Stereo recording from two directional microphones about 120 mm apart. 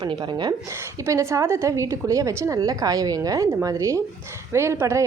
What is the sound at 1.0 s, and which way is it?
Speech, 25° right (ahead or behind).